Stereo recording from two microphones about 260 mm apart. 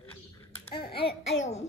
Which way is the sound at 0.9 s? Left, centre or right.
Left.